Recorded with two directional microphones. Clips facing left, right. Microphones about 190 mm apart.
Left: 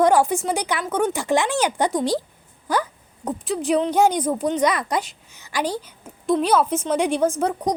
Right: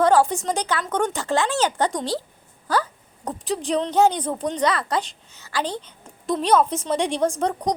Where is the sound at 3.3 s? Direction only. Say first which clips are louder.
Left 3 dB; 5° left (ahead or behind).